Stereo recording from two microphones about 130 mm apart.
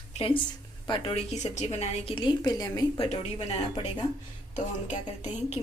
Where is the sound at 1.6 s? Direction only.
45° left (ahead or behind).